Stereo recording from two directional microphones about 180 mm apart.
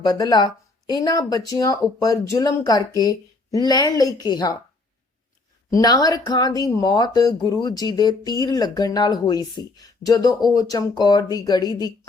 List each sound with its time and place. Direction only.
0.0 s speech: 20° left (ahead or behind)
5.7 s speech: 20° left (ahead or behind)